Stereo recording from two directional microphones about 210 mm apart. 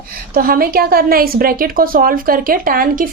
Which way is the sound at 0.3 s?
45° right (ahead or behind).